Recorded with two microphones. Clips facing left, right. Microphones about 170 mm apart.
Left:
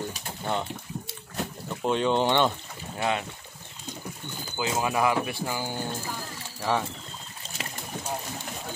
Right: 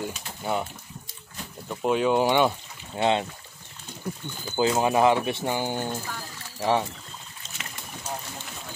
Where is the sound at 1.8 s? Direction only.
5° right (ahead or behind).